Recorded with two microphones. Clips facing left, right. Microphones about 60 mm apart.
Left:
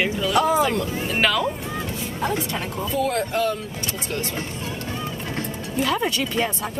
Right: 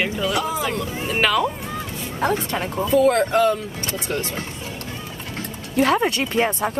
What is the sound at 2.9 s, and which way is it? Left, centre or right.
Speech, right.